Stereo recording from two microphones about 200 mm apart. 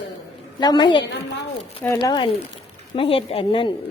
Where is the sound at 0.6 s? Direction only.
20° left (ahead or behind).